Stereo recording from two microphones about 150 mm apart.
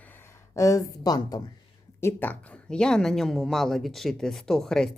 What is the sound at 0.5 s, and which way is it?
Speech, 20° left (ahead or behind).